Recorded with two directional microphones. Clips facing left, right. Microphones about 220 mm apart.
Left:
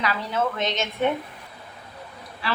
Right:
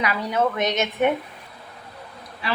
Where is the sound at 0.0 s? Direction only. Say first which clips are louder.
Right 3 dB; 15° right (ahead or behind).